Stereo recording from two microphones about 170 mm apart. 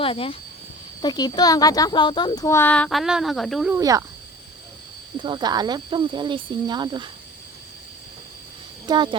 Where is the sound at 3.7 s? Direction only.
20° right (ahead or behind).